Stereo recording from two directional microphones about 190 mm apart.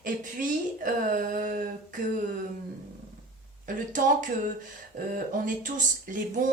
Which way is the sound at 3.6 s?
45° right (ahead or behind).